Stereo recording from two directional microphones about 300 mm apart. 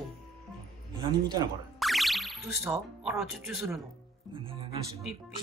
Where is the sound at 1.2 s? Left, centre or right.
Centre.